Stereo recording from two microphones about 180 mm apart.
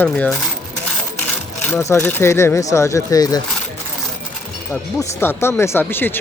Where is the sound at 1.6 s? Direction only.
15° left (ahead or behind).